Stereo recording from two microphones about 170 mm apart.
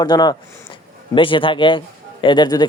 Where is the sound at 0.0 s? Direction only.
25° left (ahead or behind).